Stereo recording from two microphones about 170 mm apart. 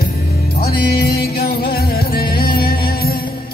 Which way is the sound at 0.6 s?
65° left (ahead or behind).